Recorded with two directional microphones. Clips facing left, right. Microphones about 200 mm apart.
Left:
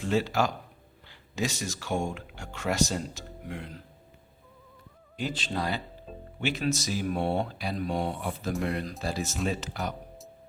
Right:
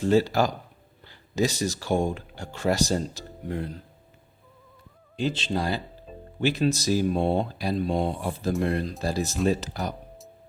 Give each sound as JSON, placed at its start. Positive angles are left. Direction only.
{"t": 0.0, "sound": "speech", "side_deg": -35}
{"t": 5.1, "sound": "speech", "side_deg": -25}